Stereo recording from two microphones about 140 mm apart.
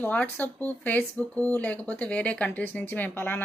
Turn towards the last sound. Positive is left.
turn(degrees=15)  # may be behind; listen again after turning